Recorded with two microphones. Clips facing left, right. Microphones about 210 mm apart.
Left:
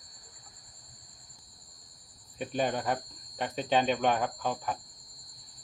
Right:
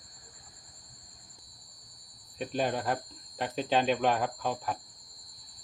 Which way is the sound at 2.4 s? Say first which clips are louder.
Even; centre (ahead or behind).